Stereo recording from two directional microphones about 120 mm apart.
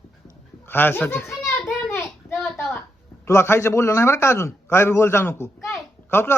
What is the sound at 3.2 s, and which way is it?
A man's voice, 20° left (ahead or behind).